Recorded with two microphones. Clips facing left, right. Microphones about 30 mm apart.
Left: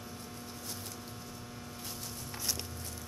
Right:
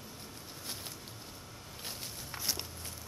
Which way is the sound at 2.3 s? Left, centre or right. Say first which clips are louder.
Right 1 dB; centre.